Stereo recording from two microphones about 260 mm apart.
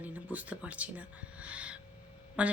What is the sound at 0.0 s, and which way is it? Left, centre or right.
Speech, centre.